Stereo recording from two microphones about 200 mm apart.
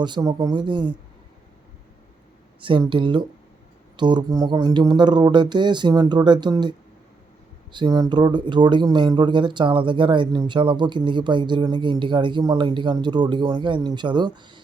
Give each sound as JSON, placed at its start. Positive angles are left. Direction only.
{"t": 0.0, "sound": "speech", "side_deg": -20}
{"t": 2.6, "sound": "speech", "side_deg": -25}